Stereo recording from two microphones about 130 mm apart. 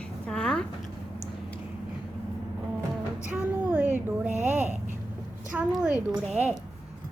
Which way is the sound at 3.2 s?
10° right (ahead or behind).